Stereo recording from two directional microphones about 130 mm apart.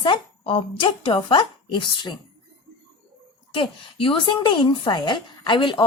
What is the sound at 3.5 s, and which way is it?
Speech, 40° left (ahead or behind).